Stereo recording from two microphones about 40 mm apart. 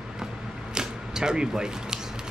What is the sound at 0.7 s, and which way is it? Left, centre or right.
Arrow, centre.